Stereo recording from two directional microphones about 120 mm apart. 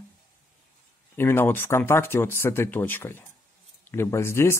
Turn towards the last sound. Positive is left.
turn(degrees=20)  # may be behind; listen again after turning